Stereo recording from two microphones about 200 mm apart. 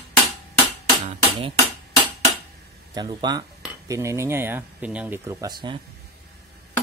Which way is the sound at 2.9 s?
20° right (ahead or behind).